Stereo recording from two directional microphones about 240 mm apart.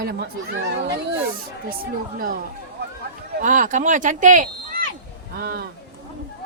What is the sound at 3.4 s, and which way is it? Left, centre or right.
Speech, right.